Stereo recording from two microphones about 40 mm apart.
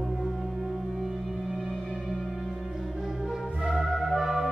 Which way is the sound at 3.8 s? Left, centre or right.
Centre.